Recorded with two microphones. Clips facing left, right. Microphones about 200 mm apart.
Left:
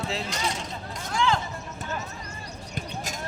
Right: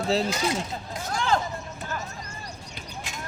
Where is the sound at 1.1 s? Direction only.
40° right (ahead or behind).